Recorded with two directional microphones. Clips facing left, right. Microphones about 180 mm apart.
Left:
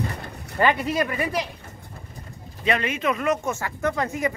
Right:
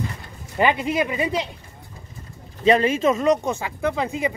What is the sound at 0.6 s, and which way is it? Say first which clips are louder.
Speech: right 1 dB; 20° right (ahead or behind).